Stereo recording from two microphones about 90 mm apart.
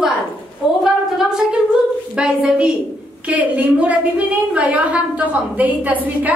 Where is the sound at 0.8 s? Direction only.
5° right (ahead or behind).